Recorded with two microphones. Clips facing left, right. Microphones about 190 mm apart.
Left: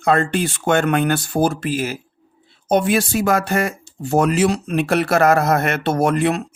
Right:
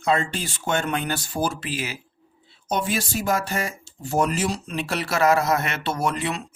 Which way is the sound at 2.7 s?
60° left (ahead or behind).